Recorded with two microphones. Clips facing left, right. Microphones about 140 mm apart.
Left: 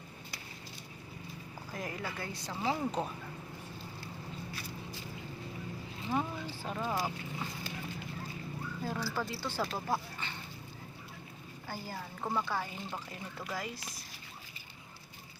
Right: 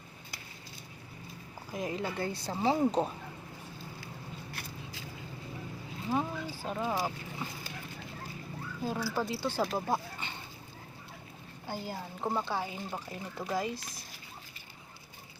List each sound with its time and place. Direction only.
1.7 s speech: 20° right (ahead or behind)
4.5 s a sound: 90° right
6.1 s speech: 10° right (ahead or behind)
8.8 s speech: 20° right (ahead or behind)
11.7 s speech: 20° right (ahead or behind)